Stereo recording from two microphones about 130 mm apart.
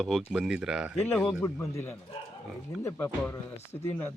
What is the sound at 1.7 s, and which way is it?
Speech, 15° left (ahead or behind).